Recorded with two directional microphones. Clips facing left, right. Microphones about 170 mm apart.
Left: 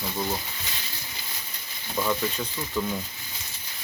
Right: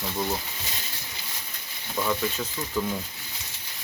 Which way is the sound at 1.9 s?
Centre (ahead or behind).